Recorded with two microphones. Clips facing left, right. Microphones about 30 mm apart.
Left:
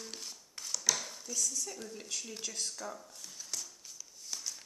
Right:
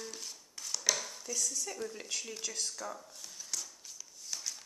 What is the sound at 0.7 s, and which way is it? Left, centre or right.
Dishes, centre.